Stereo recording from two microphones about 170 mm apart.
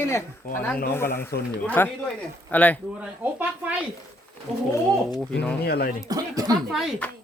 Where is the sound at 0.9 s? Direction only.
15° left (ahead or behind).